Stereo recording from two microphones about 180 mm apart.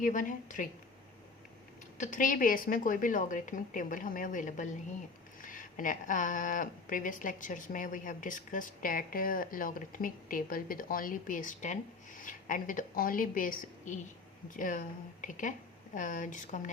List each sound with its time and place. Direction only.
0.0 s a woman's voice: 45° left (ahead or behind)
2.0 s a woman's voice: 45° left (ahead or behind)